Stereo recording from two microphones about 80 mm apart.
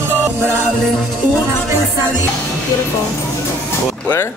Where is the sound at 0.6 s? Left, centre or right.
Centre.